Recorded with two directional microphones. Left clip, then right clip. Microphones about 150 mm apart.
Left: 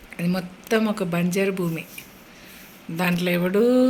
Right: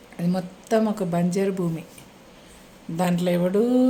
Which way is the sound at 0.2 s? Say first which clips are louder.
Even; 25° right (ahead or behind).